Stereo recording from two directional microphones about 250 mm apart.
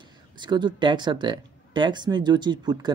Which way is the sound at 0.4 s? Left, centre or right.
Centre.